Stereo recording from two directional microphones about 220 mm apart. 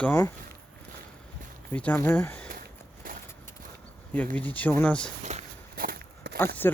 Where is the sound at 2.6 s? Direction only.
40° right (ahead or behind).